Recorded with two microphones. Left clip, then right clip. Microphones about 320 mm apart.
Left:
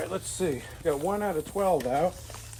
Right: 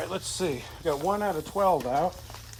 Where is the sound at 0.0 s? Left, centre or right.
Centre.